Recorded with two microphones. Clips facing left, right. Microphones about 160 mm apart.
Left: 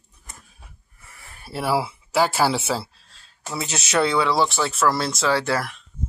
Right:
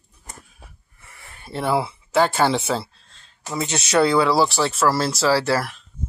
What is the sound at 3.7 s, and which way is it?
Speech, 30° right (ahead or behind).